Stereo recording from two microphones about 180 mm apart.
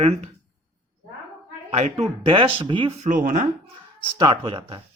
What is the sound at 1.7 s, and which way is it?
Speech, 35° right (ahead or behind).